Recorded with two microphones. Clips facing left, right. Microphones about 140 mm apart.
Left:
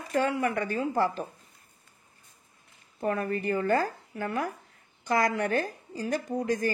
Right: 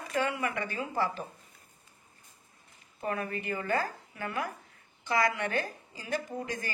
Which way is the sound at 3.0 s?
45° left (ahead or behind).